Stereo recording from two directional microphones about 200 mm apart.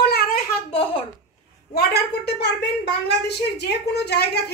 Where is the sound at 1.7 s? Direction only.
50° left (ahead or behind).